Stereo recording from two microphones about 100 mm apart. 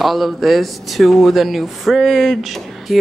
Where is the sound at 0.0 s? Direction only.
Centre (ahead or behind).